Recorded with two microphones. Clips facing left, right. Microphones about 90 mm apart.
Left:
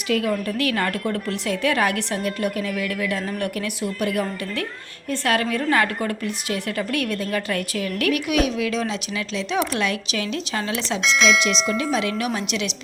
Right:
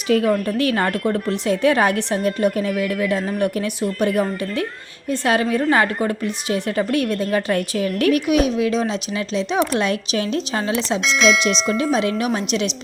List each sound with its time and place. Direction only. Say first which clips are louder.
0.1 s a woman's voice: right 5 dB; 30° right (ahead or behind)
3.2 s speech: right 5 dB; 15° right (ahead or behind)
4.0 s a woman's voice: right 5 dB; 30° right (ahead or behind)
11.0 s speech: right 1 dB; centre (ahead or behind)
11.8 s a woman's voice: right 4 dB; 30° right (ahead or behind)